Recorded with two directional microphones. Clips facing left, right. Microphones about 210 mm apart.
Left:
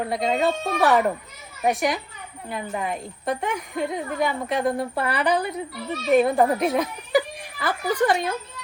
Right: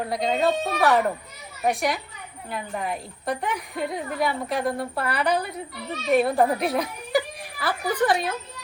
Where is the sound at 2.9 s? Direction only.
Centre (ahead or behind).